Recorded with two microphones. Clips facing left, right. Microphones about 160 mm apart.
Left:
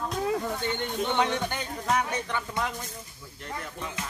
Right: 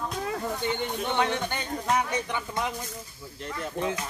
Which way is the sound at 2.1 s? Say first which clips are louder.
Right 1 dB; 15° right (ahead or behind).